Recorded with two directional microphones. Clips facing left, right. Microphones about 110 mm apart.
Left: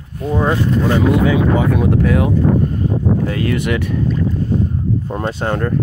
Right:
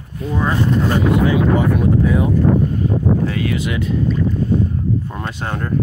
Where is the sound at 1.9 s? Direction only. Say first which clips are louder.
Left 1 dB; 80° left.